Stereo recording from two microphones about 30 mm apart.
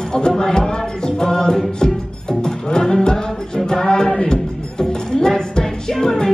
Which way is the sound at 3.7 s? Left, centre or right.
Left.